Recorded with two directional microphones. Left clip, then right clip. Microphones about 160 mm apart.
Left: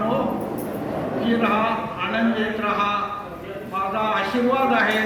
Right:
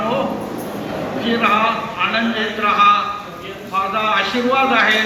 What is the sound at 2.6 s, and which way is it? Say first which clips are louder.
A man's voice: right 12 dB; 25° left (ahead or behind).